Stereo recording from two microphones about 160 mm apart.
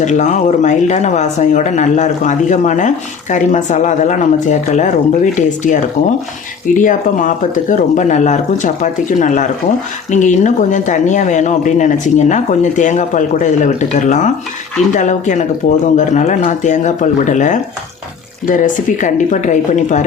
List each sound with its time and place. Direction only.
0.0 s speech: 50° left (ahead or behind)